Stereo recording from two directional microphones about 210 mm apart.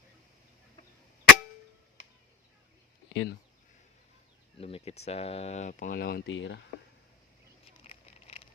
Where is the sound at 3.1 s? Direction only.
65° left (ahead or behind).